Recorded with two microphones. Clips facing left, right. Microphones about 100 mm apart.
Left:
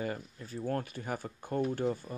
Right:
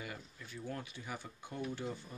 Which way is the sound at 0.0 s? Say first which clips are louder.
Left 10 dB; 40° left (ahead or behind).